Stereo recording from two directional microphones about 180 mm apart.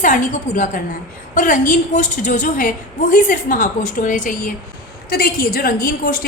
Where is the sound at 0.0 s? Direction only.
45° left (ahead or behind).